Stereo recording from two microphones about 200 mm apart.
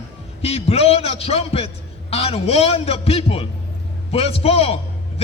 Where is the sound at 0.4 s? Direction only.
30° left (ahead or behind).